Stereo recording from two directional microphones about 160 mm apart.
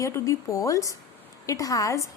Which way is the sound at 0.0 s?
20° left (ahead or behind).